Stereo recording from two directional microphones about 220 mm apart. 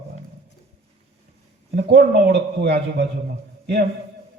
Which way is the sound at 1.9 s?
50° right (ahead or behind).